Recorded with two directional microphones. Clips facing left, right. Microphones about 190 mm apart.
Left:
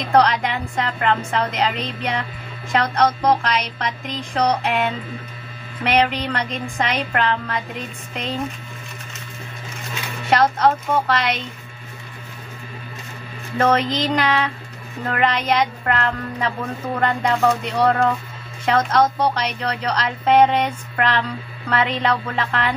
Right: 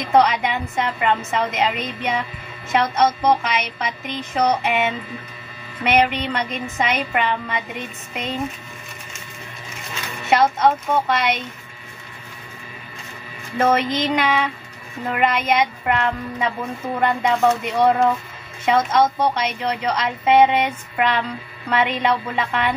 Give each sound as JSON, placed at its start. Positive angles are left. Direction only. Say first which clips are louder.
{"t": 0.1, "sound": "music", "louder": "even", "side_deg": -5}
{"t": 10.3, "sound": "a woman's voice", "louder": "even", "side_deg": -5}
{"t": 13.6, "sound": "a woman's voice", "louder": "even", "side_deg": -5}
{"t": 17.0, "sound": "music", "louder": "right 1 dB", "side_deg": -5}
{"t": 18.7, "sound": "a woman's voice", "louder": "even", "side_deg": -5}